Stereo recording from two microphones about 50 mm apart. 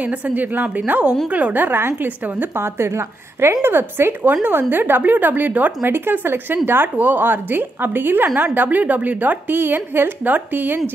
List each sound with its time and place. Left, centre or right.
0.0 s a woman's voice: right
2.0 s a woman's voice: right
2.5 s a woman's voice: right
3.6 s a woman's voice: right